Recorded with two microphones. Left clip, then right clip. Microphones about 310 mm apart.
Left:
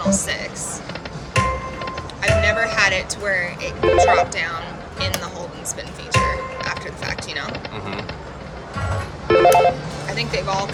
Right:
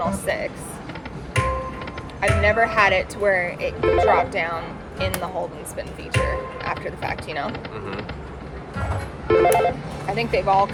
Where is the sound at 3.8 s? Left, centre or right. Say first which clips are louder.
Left 3 dB; centre.